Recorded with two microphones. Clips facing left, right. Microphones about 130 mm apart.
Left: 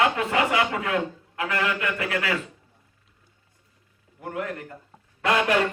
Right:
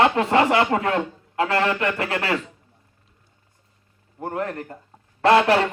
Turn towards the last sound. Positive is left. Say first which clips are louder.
# right 6 dB
turn(degrees=-35)  # may be behind; listen again after turning